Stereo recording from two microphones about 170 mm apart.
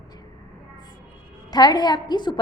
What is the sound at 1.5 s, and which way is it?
Speech, 25° left (ahead or behind).